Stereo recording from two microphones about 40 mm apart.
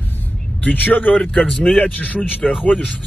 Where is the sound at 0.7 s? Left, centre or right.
Left.